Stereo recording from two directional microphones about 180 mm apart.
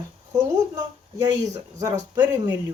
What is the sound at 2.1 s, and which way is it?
Speech, 20° right (ahead or behind).